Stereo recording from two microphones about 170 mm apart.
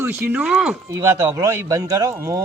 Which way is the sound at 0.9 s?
15° right (ahead or behind).